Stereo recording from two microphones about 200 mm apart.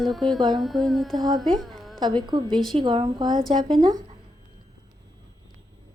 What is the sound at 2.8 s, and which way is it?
A woman's voice, 25° right (ahead or behind).